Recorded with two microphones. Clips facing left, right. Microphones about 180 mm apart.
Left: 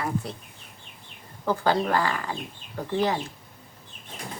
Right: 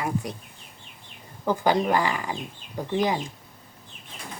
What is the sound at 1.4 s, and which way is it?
Speech, 15° right (ahead or behind).